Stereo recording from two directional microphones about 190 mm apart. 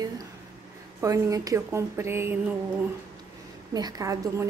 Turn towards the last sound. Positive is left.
turn(degrees=-15)  # may be behind; listen again after turning